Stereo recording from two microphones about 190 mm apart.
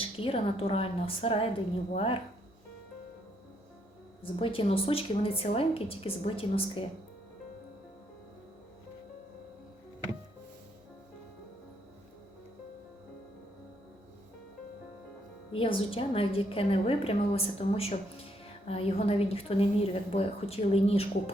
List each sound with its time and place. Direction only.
0.0 s a woman's voice: 30° left (ahead or behind)
4.2 s a woman's voice: 30° left (ahead or behind)
15.5 s a woman's voice: 30° left (ahead or behind)